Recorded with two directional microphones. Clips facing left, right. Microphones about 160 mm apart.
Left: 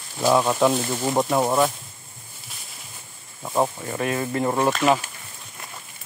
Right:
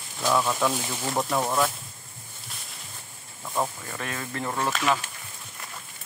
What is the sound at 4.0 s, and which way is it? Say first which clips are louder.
Speech: left 9 dB; 15° left (ahead or behind).